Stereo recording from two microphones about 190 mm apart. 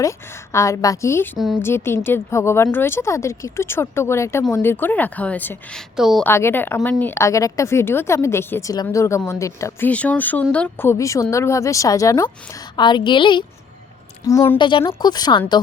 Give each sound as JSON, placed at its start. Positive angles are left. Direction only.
{"t": 0.0, "sound": "a woman's voice", "side_deg": 15}
{"t": 1.4, "sound": "a woman's voice", "side_deg": 0}
{"t": 1.6, "sound": "a woman's voice", "side_deg": 10}
{"t": 6.0, "sound": "a woman's voice", "side_deg": 0}
{"t": 6.2, "sound": "a woman's voice", "side_deg": 10}
{"t": 14.3, "sound": "a woman's voice", "side_deg": 15}
{"t": 14.6, "sound": "speech", "side_deg": 25}